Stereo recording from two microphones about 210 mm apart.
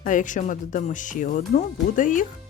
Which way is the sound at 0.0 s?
40° left (ahead or behind).